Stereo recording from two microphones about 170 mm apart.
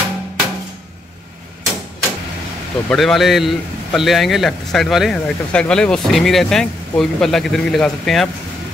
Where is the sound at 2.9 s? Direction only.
Centre (ahead or behind).